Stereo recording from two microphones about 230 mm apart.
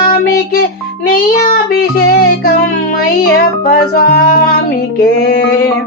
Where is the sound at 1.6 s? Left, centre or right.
Left.